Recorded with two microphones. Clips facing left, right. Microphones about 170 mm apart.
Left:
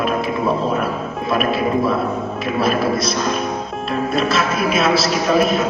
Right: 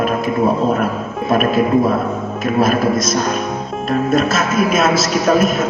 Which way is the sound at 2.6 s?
45° right (ahead or behind).